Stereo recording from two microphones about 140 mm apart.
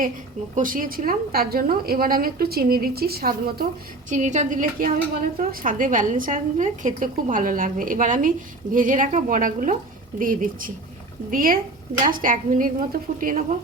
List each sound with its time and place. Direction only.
0.5 s a woman's voice: 75° right (ahead or behind); by 3.7 s 90° right
4.1 s a woman's voice: 60° right (ahead or behind); by 13.4 s 75° right (ahead or behind)